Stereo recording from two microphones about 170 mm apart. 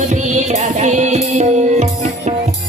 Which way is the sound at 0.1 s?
45° right (ahead or behind).